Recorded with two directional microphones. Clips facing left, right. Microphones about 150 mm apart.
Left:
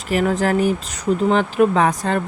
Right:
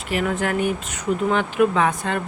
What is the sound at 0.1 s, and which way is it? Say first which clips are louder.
Speech: left 5 dB; 35° left (ahead or behind).